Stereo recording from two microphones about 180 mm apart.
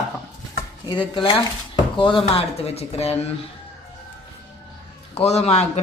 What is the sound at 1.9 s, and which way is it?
Speech, 30° left (ahead or behind).